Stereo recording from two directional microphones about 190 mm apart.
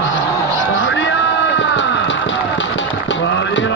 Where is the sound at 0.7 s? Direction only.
75° left (ahead or behind).